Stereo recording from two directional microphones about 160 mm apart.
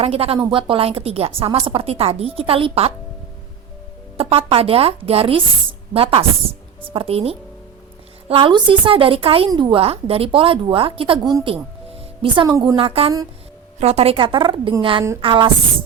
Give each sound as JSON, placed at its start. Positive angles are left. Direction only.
{"t": 0.0, "sound": "a woman's voice", "side_deg": -40}
{"t": 4.2, "sound": "a woman's voice", "side_deg": -35}
{"t": 12.5, "sound": "a woman's voice", "side_deg": -20}
{"t": 12.7, "sound": "a woman's voice", "side_deg": -35}